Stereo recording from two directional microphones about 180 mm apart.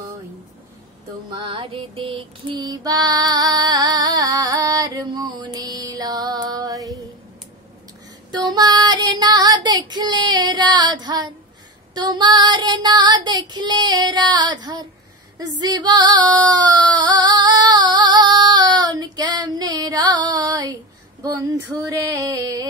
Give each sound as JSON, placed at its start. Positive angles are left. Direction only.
{"t": 1.3, "sound": "female singing", "side_deg": -30}
{"t": 8.3, "sound": "child singing", "side_deg": -20}
{"t": 15.3, "sound": "female singing", "side_deg": -20}
{"t": 21.2, "sound": "a sound", "side_deg": -20}